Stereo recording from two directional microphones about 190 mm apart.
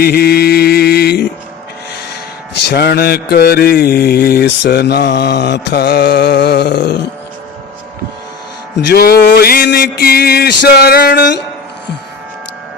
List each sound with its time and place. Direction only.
0.0 s mantra: 55° left (ahead or behind)
2.5 s mantra: 60° left (ahead or behind)
8.9 s mantra: 55° left (ahead or behind)